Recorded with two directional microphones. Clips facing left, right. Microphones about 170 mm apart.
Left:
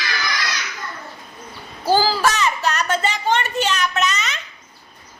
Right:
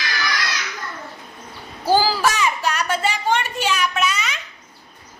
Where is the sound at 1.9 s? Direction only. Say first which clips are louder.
Even; 10° right (ahead or behind).